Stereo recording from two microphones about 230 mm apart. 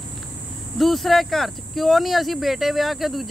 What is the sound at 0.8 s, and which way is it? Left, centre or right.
Speech, centre.